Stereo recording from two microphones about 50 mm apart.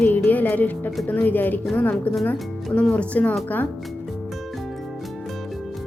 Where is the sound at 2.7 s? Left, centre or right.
Left.